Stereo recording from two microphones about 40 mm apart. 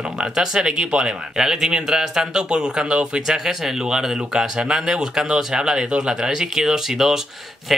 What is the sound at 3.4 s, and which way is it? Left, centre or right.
A man's voice, centre.